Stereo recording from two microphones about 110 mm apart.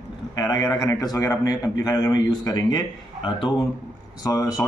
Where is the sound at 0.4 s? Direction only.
35° left (ahead or behind).